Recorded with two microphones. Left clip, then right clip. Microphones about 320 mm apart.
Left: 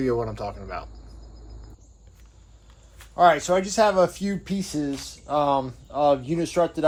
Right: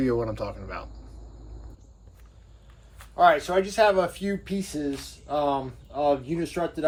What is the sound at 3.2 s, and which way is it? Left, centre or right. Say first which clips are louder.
Speech: left 2 dB; left.